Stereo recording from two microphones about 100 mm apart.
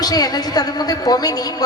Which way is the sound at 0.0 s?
40° left (ahead or behind).